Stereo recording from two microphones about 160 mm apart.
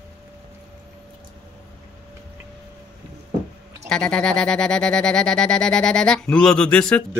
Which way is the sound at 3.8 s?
5° left (ahead or behind).